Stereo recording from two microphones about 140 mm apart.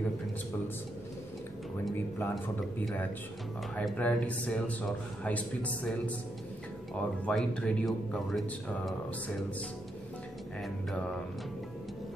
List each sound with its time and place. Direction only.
2.0 s speech: 15° left (ahead or behind)
3.7 s speech: 10° left (ahead or behind)